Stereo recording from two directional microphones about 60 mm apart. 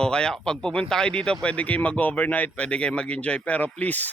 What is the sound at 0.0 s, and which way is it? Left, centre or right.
Speech, centre.